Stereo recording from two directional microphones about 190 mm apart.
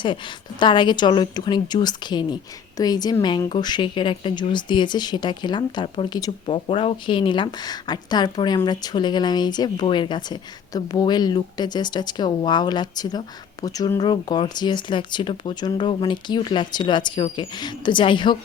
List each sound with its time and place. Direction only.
0.6 s a woman's voice: 25° left (ahead or behind)